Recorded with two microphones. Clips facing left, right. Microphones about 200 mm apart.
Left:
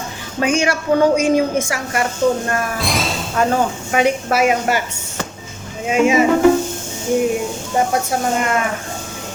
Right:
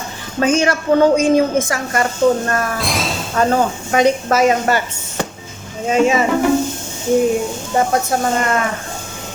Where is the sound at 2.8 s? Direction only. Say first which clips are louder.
Even; centre (ahead or behind).